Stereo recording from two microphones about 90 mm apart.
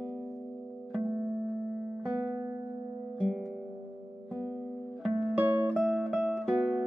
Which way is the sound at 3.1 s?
5° left (ahead or behind).